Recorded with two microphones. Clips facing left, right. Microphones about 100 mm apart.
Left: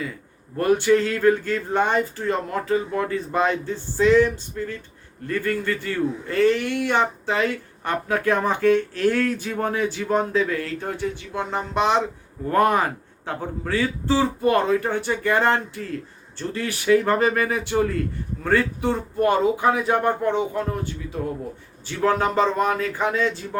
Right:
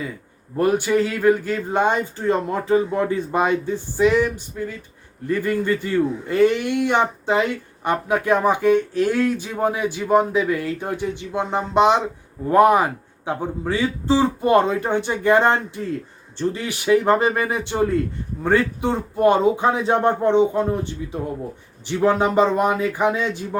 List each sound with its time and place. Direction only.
0.5 s a man's voice: 15° right (ahead or behind)